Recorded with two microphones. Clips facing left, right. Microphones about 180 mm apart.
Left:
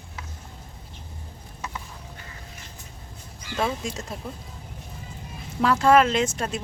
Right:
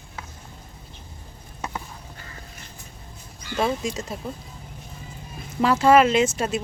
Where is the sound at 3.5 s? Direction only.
Centre (ahead or behind).